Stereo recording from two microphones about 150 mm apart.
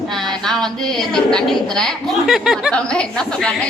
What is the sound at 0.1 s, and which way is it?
A woman's voice, 5° left (ahead or behind).